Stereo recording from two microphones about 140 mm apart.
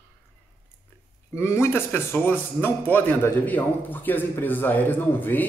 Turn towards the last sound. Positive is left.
turn(degrees=15)  # may be behind; listen again after turning